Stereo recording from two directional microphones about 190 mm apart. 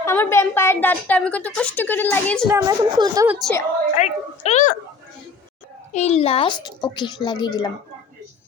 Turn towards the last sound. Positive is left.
turn(degrees=20)  # may be behind; listen again after turning